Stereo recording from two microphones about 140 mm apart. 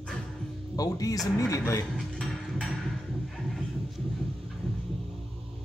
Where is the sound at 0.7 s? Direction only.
25° left (ahead or behind).